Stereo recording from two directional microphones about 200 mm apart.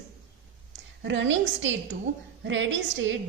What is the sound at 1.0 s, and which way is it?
A woman's voice, 70° right (ahead or behind).